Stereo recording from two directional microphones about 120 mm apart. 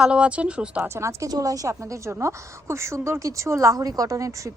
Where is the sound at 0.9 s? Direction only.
25° right (ahead or behind).